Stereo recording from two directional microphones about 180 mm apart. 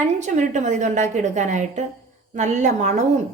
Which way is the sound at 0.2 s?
40° right (ahead or behind).